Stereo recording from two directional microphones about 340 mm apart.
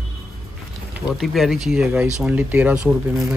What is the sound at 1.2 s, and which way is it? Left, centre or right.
Speech, centre.